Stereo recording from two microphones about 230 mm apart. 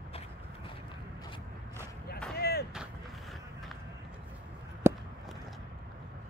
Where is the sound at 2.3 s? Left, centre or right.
Left.